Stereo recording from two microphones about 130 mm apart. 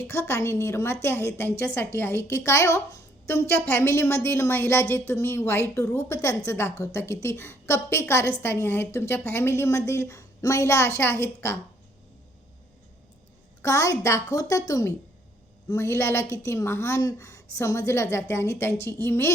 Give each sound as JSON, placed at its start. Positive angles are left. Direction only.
{"t": 0.1, "sound": "a woman's voice", "side_deg": 20}
{"t": 13.6, "sound": "a woman's voice", "side_deg": 25}